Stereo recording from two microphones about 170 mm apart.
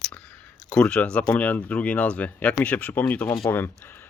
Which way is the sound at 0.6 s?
5° left (ahead or behind).